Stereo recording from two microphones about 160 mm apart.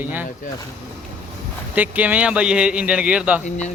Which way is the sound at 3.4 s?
45° left (ahead or behind).